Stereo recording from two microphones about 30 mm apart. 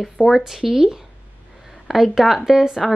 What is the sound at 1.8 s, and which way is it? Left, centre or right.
Speech, centre.